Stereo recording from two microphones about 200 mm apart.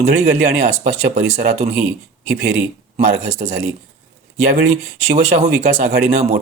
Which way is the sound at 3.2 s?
35° right (ahead or behind).